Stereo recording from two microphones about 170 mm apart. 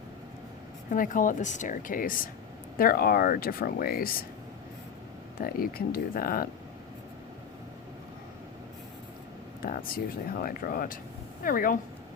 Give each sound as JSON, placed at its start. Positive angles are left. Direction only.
{"t": 0.9, "sound": "a woman's voice", "side_deg": 50}
{"t": 5.4, "sound": "speech", "side_deg": 60}
{"t": 9.6, "sound": "air conditioning", "side_deg": 60}
{"t": 10.4, "sound": "speech", "side_deg": 60}